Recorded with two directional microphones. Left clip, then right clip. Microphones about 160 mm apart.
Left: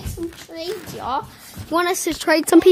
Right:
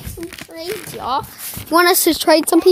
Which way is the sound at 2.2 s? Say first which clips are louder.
Right 5 dB; 15° right (ahead or behind).